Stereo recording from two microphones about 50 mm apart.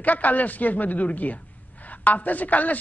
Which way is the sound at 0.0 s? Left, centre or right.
Left.